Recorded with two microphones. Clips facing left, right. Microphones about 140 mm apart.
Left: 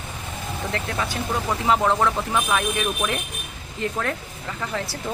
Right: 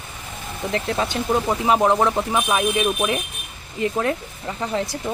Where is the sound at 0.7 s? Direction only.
25° right (ahead or behind).